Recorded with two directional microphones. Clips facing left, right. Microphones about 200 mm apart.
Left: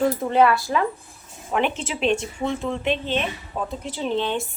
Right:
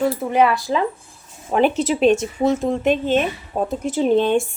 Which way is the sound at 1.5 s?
40° right (ahead or behind).